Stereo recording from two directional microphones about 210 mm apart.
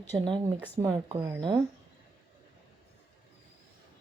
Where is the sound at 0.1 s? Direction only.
15° right (ahead or behind).